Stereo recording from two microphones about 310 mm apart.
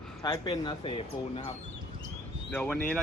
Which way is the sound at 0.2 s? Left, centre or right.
Centre.